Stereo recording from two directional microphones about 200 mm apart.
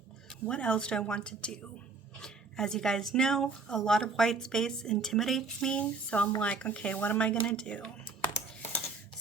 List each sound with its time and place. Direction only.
0.4 s speech: 5° left (ahead or behind)